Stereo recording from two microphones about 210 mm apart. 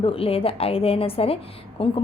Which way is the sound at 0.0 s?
25° left (ahead or behind).